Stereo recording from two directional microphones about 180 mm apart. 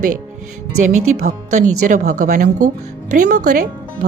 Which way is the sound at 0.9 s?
40° right (ahead or behind).